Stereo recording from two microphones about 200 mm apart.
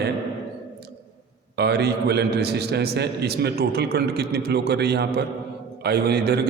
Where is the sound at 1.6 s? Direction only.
55° right (ahead or behind).